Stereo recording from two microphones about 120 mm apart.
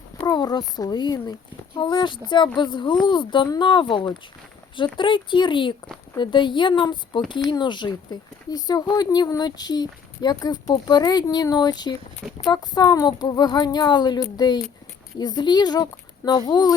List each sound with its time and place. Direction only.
0.2 s speech: 35° left (ahead or behind)